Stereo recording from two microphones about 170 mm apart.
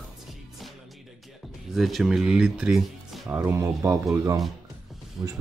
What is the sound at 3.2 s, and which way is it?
Speech, 15° right (ahead or behind).